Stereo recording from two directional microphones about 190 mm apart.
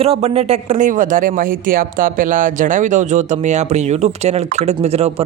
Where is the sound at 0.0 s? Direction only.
30° right (ahead or behind).